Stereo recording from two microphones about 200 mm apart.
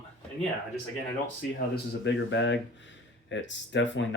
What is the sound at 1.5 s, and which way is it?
Speech, 60° left (ahead or behind).